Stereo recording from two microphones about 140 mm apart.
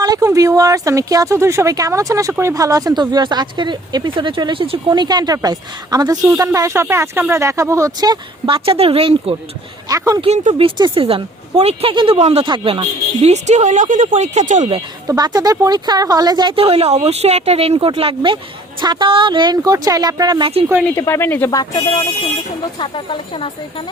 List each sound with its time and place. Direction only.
0.0 s a woman's voice: 25° right (ahead or behind)
4.9 s a woman's voice: 30° right (ahead or behind)
9.9 s a woman's voice: 20° right (ahead or behind)
10.2 s speech: 50° right (ahead or behind)
10.8 s speech: 35° right (ahead or behind)
13.3 s speech: 55° right (ahead or behind)
15.0 s speech: 30° right (ahead or behind)
20.9 s speech: 20° left (ahead or behind)
21.5 s speech: 25° left (ahead or behind)
22.8 s speech: 40° left (ahead or behind)